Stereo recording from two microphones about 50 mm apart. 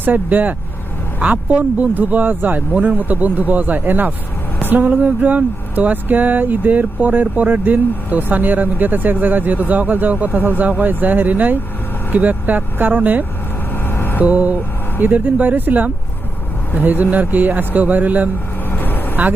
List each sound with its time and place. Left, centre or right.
0.0 s speech: right
13.8 s vehicle: left
14.2 s speech: right
18.7 s vehicle: left